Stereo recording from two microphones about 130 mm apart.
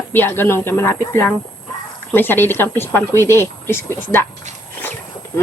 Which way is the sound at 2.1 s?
15° left (ahead or behind).